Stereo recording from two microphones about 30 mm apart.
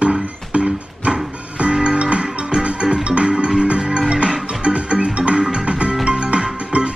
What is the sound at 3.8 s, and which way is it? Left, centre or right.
Music, right.